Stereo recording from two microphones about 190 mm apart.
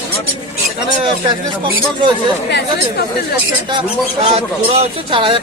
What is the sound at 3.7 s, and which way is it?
Speech, 25° right (ahead or behind).